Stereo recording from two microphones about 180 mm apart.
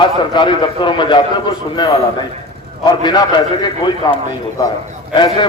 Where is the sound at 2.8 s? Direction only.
25° left (ahead or behind).